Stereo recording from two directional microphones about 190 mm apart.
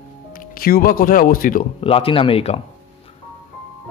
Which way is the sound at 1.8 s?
30° left (ahead or behind).